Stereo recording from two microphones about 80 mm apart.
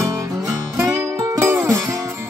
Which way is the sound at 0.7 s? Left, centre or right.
Right.